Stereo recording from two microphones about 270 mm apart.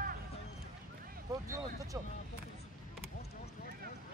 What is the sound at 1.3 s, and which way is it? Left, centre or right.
Speech, centre.